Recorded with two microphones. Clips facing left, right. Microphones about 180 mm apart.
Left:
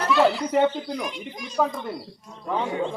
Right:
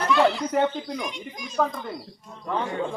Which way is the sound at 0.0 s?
Centre (ahead or behind).